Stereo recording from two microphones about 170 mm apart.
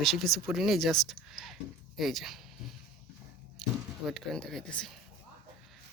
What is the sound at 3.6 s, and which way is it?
Speech, centre (ahead or behind).